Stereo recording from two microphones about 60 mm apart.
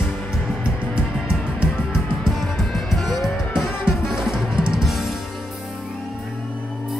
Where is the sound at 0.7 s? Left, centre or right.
Centre.